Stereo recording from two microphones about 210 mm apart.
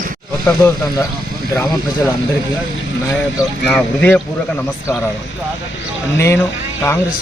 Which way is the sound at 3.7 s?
5° left (ahead or behind).